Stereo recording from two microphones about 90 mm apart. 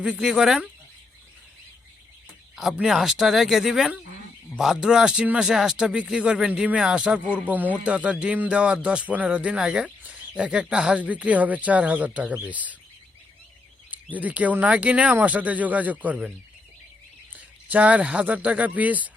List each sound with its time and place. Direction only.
0.0 s speech: 10° right (ahead or behind)
2.8 s speech: 5° right (ahead or behind)
13.9 s speech: 15° right (ahead or behind)
17.3 s speech: 15° right (ahead or behind)